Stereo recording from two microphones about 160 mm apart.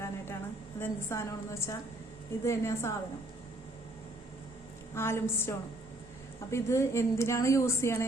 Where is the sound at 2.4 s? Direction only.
15° left (ahead or behind).